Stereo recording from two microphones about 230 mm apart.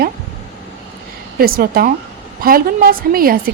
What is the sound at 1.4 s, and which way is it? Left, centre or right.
A woman's voice, right.